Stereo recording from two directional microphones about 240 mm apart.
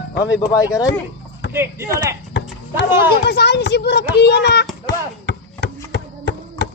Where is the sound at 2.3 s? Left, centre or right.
Left.